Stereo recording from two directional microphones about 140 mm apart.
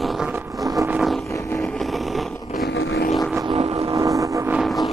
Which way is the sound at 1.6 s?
5° left (ahead or behind).